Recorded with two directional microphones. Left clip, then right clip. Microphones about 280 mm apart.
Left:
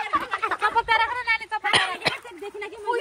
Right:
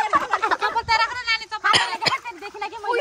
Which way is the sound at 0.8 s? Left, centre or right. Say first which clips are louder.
Right 1 dB; left.